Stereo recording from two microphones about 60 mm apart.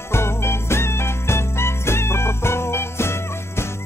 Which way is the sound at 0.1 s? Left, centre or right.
Left.